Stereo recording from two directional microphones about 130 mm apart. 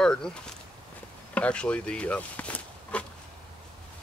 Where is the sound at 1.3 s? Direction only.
10° left (ahead or behind).